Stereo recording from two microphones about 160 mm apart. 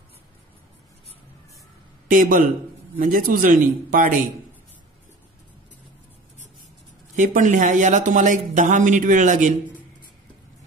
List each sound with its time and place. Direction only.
2.0 s speech: 60° right (ahead or behind)
7.2 s speech: 50° right (ahead or behind)